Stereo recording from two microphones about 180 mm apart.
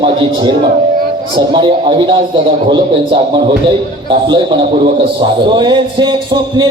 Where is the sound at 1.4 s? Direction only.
25° right (ahead or behind).